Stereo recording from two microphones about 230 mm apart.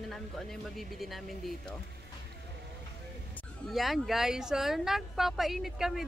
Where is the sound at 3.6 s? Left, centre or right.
Centre.